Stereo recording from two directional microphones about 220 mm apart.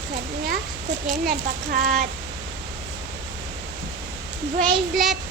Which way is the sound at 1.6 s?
40° right (ahead or behind).